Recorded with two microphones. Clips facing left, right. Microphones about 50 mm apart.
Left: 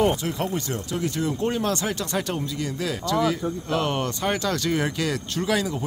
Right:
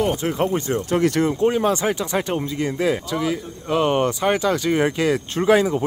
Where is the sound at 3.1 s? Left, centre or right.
Centre.